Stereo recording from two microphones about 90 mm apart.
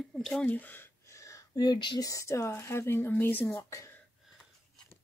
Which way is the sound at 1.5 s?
50° left (ahead or behind).